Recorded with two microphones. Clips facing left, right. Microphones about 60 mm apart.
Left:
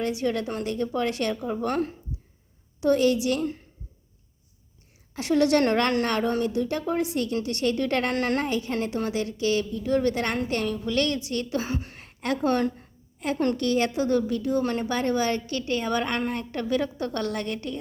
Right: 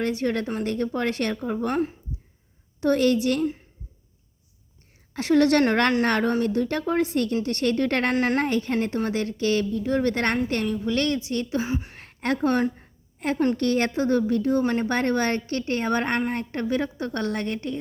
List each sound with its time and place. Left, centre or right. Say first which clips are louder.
0.0 s a woman's voice: right 1 dB; right
1.6 s a woman's voice: right 1 dB; right
2.8 s speech: right 1 dB; right
5.1 s speech: right 2 dB; right
8.1 s a woman's voice: right 2 dB; right
8.4 s a woman's voice: right 3 dB; right
10.3 s a woman's voice: right 2 dB; right
11.6 s speech: right 3 dB; centre
11.9 s a woman's voice: right 2 dB; right